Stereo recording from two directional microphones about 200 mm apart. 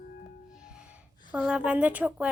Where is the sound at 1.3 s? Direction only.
5° right (ahead or behind).